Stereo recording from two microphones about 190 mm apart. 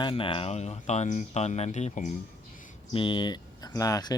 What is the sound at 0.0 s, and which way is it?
Speech, 25° left (ahead or behind).